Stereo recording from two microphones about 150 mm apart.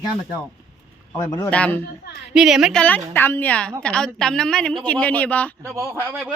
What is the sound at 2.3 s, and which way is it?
A woman's voice, 5° right (ahead or behind).